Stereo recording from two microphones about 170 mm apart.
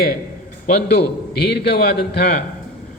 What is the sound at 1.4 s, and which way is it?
Speech, 75° left (ahead or behind).